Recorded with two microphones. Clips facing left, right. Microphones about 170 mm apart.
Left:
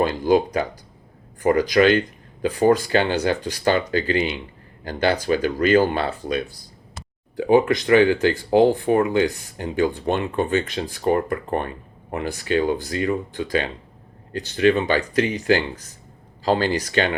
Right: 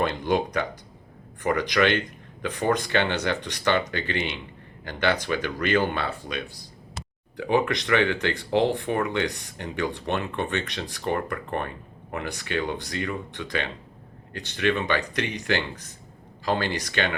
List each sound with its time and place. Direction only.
0.0 s speech: 30° left (ahead or behind)
7.3 s a sound: 30° left (ahead or behind)
7.9 s speech: 30° left (ahead or behind)